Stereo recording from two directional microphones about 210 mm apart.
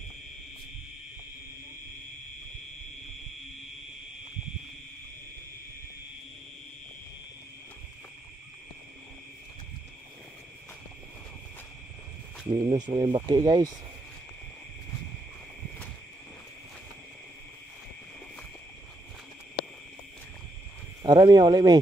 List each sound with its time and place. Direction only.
12.4 s speech: 25° right (ahead or behind)
21.0 s speech: 20° right (ahead or behind)